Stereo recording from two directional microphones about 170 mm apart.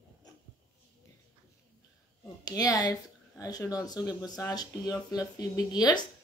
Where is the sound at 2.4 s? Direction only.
20° left (ahead or behind).